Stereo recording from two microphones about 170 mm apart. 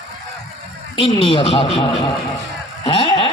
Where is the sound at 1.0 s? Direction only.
30° left (ahead or behind).